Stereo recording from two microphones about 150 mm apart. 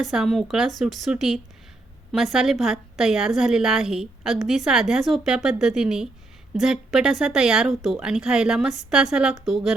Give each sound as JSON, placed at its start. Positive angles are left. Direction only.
{"t": 0.0, "sound": "a woman's voice", "side_deg": 0}